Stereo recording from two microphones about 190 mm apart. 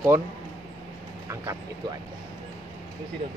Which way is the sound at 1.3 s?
15° right (ahead or behind).